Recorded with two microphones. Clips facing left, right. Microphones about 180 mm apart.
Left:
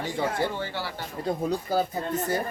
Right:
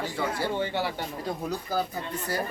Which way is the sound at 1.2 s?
25° left (ahead or behind).